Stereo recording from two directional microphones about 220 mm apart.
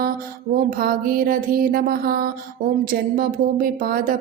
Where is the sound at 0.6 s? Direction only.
40° right (ahead or behind).